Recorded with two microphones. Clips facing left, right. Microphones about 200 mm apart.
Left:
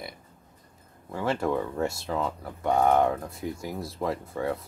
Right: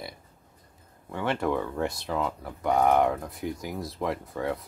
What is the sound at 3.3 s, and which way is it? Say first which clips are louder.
Speech: even; 25° left (ahead or behind).